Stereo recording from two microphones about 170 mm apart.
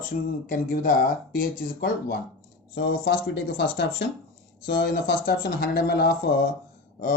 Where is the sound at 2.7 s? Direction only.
65° left (ahead or behind).